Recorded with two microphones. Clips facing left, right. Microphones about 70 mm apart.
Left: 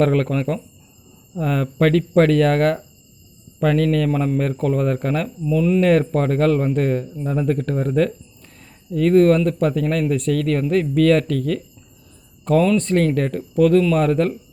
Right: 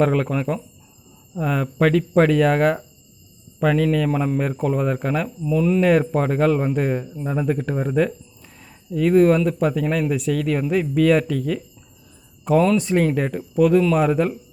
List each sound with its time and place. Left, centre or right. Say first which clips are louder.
0.0 s speech: left 1 dB; centre
5.5 s speech: left 1 dB; right
5.8 s speech: left 1 dB; centre
12.7 s speech: left 1 dB; centre